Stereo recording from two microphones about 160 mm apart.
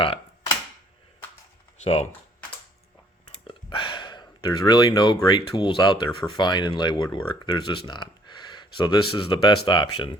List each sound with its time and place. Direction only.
1.8 s speech: 40° left (ahead or behind)
3.4 s speech: 30° left (ahead or behind)